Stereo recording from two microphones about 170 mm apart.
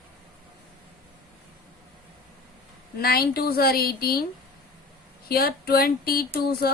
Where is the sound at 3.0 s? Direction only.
65° left (ahead or behind).